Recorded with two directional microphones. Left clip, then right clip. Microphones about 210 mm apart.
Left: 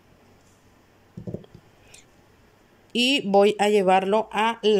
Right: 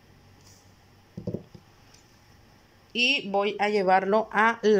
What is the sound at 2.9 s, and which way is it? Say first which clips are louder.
Speech: left 4 dB; 25° left (ahead or behind).